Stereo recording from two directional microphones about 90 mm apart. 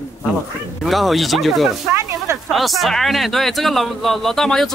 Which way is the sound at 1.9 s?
30° right (ahead or behind).